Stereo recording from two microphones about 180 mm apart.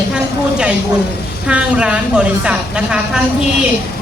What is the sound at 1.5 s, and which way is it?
A woman's voice, 5° right (ahead or behind).